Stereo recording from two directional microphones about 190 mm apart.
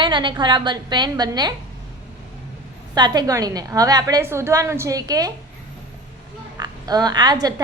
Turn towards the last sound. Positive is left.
turn(degrees=-20)  # may be behind; listen again after turning